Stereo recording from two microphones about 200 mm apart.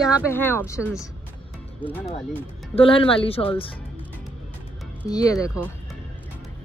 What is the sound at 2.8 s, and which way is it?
Speech, 25° left (ahead or behind).